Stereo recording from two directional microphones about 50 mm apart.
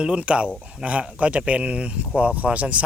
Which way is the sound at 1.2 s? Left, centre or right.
Right.